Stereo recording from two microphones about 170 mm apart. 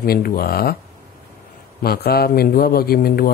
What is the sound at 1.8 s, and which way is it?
Speech, 65° left (ahead or behind).